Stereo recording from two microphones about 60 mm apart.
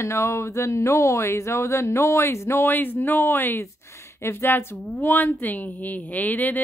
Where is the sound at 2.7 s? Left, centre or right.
Left.